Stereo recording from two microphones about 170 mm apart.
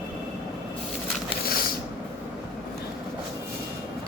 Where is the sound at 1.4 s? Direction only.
60° left (ahead or behind).